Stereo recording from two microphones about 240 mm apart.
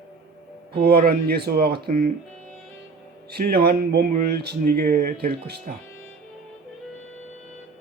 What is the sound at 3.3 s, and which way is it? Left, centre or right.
Speech, right.